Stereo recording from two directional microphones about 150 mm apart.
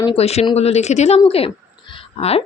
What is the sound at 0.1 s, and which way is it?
Speech, 45° left (ahead or behind).